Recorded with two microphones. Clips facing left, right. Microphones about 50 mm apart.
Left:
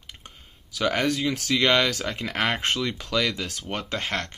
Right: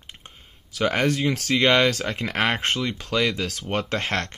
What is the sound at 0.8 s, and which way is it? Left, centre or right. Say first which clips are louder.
Speech: right 2 dB; right.